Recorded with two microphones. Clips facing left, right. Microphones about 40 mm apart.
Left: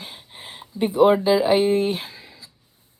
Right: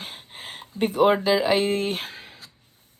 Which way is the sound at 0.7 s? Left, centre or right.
Right.